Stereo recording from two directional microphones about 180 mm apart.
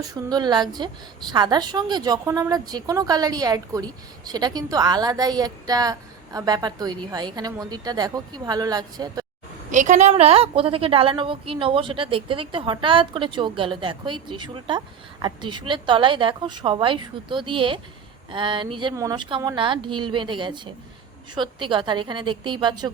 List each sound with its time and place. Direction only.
0.0 s a woman's voice: 20° right (ahead or behind)
9.7 s a woman's voice: 45° right (ahead or behind); by 22.9 s 25° right (ahead or behind)